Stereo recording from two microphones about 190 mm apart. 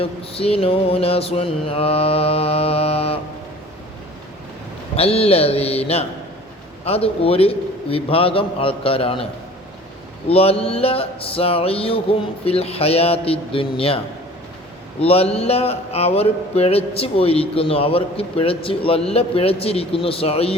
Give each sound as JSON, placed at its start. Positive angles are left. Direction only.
{"t": 0.0, "sound": "speech", "side_deg": 30}
{"t": 4.9, "sound": "a man's voice", "side_deg": 30}
{"t": 10.2, "sound": "speech", "side_deg": 30}
{"t": 15.0, "sound": "speech", "side_deg": 30}